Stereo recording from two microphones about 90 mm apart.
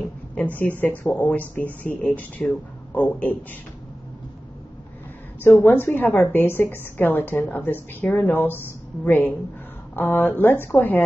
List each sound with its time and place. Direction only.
0.6 s a woman's voice: 20° left (ahead or behind)
5.4 s a woman's voice: 20° left (ahead or behind)